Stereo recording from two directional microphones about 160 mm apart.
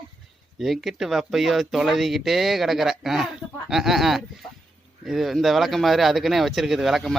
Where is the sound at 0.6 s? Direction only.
Centre (ahead or behind).